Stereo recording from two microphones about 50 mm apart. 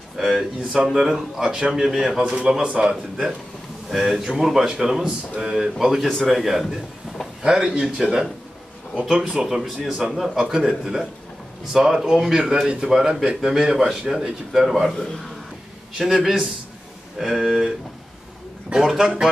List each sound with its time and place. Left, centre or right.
0.2 s a man's voice: centre
7.4 s a man's voice: centre
9.3 s a man's voice: centre
16.0 s a man's voice: centre